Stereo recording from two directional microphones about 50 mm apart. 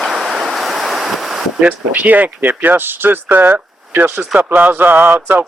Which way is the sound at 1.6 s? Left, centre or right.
Right.